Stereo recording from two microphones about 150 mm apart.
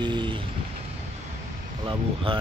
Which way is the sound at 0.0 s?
30° right (ahead or behind).